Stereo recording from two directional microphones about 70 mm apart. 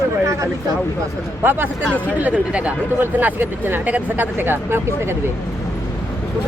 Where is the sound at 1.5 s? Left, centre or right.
Right.